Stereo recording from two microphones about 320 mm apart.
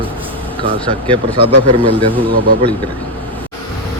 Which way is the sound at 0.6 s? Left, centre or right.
Centre.